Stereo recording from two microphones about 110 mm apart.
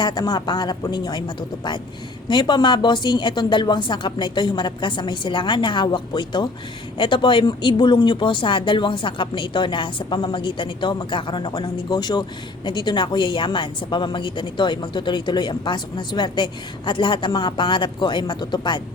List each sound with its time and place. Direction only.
0.0 s a woman's voice: 40° left (ahead or behind)